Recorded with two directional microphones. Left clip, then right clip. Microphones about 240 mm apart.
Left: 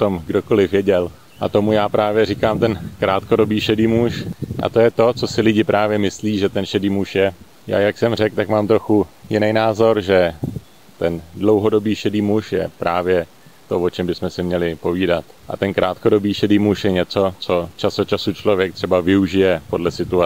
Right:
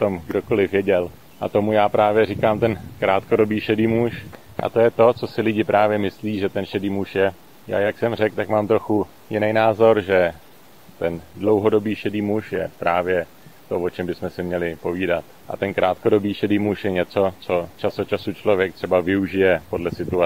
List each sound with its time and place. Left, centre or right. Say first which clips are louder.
0.0 s speech: left 3 dB; left